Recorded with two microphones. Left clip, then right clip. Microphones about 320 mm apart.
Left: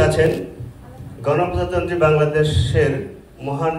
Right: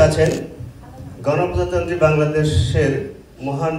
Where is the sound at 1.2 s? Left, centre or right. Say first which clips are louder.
Even; centre.